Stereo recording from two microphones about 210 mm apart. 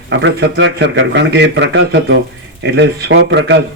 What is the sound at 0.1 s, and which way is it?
Speech, 60° right (ahead or behind).